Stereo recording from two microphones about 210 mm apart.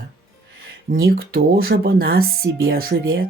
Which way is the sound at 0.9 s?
45° right (ahead or behind).